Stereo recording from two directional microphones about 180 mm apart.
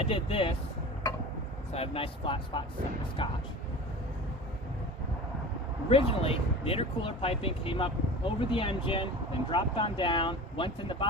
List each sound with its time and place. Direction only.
0.0 s speech: 30° left (ahead or behind)
1.7 s speech: 35° left (ahead or behind)
5.9 s speech: 30° left (ahead or behind)